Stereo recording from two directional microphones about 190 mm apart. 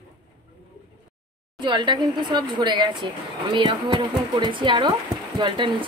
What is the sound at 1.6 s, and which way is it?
A woman's voice, 25° right (ahead or behind).